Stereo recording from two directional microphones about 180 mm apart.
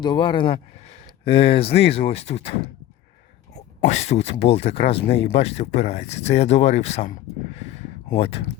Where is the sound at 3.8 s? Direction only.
40° left (ahead or behind).